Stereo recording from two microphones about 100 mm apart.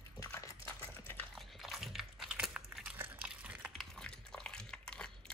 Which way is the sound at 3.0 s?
15° right (ahead or behind).